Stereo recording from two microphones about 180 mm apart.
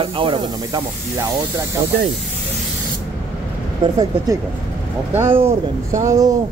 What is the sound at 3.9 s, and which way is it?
A man's voice, 20° right (ahead or behind).